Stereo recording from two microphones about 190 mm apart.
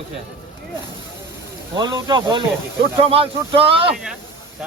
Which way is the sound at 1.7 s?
20° right (ahead or behind).